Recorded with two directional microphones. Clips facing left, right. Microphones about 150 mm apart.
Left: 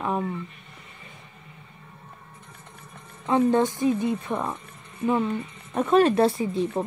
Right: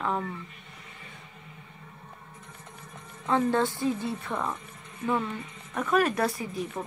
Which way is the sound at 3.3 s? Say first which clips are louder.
Left 4 dB; 20° left (ahead or behind).